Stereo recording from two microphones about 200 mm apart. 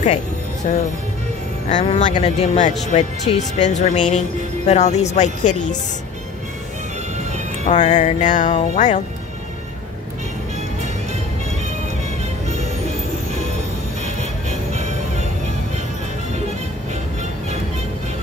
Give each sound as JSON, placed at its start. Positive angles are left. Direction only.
{"t": 0.7, "sound": "speech", "side_deg": 40}
{"t": 7.6, "sound": "speech", "side_deg": 35}